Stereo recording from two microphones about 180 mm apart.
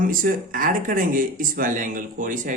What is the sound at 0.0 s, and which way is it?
Speech, 50° right (ahead or behind).